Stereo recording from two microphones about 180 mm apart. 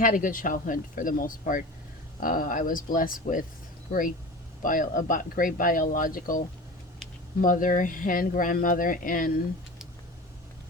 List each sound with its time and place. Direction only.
0.0 s speech: 50° left (ahead or behind)
4.6 s speech: 50° left (ahead or behind)
7.4 s speech: 50° left (ahead or behind)